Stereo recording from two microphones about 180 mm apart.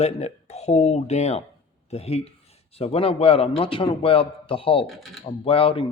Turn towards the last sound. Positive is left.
turn(degrees=30)  # may be behind; listen again after turning